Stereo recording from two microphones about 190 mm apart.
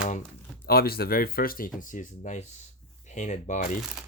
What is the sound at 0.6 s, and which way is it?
Speech, 55° left (ahead or behind).